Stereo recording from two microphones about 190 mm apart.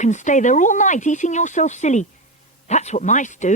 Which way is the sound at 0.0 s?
40° left (ahead or behind).